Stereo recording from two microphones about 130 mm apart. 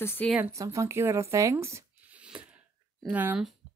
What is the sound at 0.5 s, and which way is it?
Speech, 25° right (ahead or behind).